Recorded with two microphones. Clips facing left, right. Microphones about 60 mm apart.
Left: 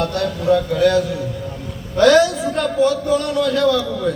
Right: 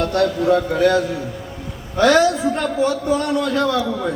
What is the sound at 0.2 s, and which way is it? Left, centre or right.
A man's voice, right.